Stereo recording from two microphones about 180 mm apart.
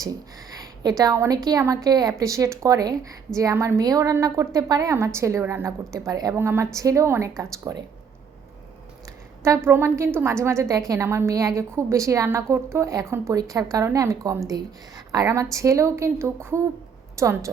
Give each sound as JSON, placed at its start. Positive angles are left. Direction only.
{"t": 0.6, "sound": "a woman's voice", "side_deg": -20}
{"t": 9.6, "sound": "a woman's voice", "side_deg": -15}